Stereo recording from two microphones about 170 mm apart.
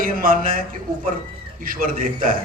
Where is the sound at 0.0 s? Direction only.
55° right (ahead or behind).